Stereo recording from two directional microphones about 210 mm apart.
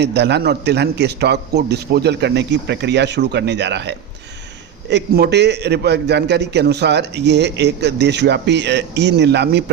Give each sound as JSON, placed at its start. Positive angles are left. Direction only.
{"t": 0.0, "sound": "a man's voice", "side_deg": -55}